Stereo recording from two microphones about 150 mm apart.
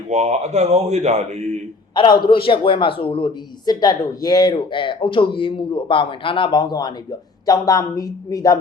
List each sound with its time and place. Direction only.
0.1 s speech: 50° right (ahead or behind)
2.0 s a man's voice: 30° left (ahead or behind)